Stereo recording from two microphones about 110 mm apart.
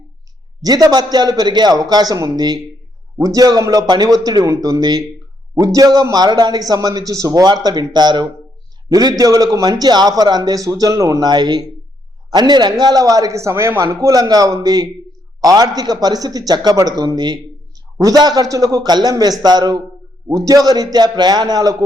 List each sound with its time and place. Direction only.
0.6 s a man's voice: 35° right (ahead or behind)